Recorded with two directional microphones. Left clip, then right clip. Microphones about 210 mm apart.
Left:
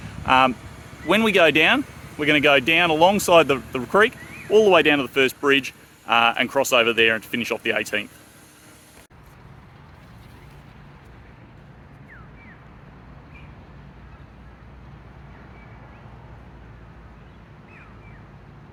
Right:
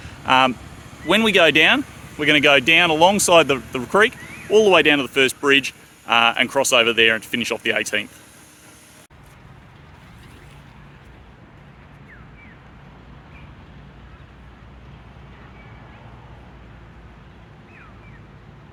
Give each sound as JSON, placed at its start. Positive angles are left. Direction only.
{"t": 0.3, "sound": "speech", "side_deg": -5}
{"t": 0.5, "sound": "a sound", "side_deg": 25}
{"t": 1.0, "sound": "speech", "side_deg": -5}